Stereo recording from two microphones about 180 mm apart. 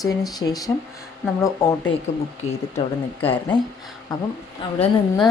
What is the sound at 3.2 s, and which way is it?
Speech, 30° left (ahead or behind).